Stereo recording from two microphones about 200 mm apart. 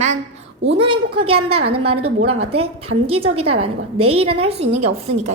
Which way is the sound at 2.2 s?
90° right.